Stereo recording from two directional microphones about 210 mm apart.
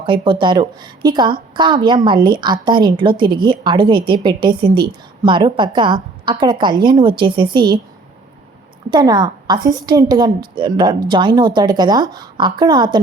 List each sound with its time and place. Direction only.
0.0 s a woman's voice: 25° right (ahead or behind)
8.9 s a woman's voice: 20° right (ahead or behind)